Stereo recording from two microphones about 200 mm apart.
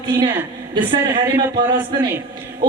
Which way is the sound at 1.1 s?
10° right (ahead or behind).